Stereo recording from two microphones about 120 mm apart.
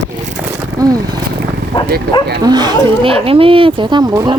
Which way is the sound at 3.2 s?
50° right (ahead or behind).